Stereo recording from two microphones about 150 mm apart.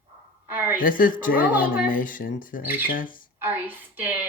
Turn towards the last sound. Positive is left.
turn(degrees=-15)  # may be behind; listen again after turning